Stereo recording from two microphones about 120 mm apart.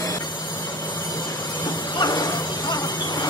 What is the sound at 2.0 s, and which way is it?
Music, 35° left (ahead or behind).